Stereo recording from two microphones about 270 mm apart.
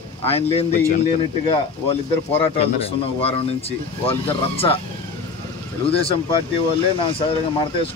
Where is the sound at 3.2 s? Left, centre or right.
Left.